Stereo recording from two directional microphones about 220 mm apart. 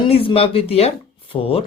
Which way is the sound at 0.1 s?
25° left (ahead or behind).